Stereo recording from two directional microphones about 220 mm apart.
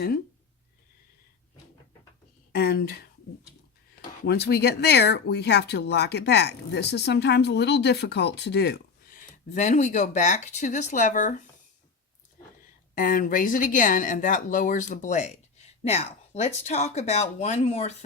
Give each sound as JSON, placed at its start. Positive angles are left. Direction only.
{"t": 2.5, "sound": "speech", "side_deg": 45}
{"t": 4.3, "sound": "speech", "side_deg": 50}
{"t": 9.3, "sound": "speech", "side_deg": 35}
{"t": 12.9, "sound": "speech", "side_deg": 40}